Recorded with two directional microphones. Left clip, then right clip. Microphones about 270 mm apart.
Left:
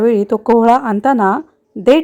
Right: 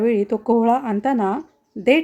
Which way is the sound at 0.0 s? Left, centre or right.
Left.